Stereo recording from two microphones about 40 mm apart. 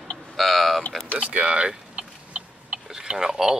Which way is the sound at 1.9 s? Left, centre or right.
Right.